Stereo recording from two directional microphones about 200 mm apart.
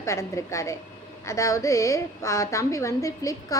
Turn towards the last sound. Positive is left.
turn(degrees=15)  # may be behind; listen again after turning